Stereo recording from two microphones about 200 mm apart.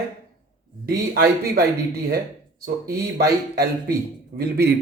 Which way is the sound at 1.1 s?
50° right (ahead or behind).